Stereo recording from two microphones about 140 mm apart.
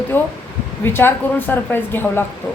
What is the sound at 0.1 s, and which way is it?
Speech, 15° left (ahead or behind).